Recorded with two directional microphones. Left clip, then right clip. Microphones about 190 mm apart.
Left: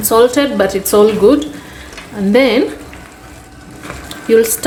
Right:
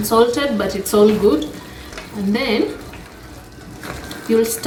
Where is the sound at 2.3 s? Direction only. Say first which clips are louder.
Left 10 dB; 55° left (ahead or behind).